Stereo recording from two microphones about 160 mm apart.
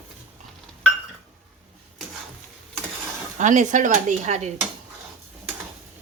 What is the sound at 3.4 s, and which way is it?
Speech, 50° right (ahead or behind).